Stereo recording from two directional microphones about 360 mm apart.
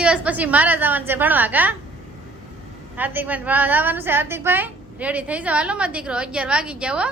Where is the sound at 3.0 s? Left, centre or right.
Centre.